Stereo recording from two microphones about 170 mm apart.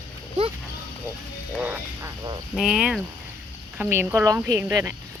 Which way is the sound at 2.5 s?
5° right (ahead or behind).